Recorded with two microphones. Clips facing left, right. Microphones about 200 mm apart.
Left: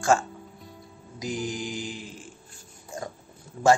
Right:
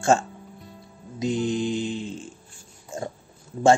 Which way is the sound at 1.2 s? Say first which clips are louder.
Right 7 dB; 25° right (ahead or behind).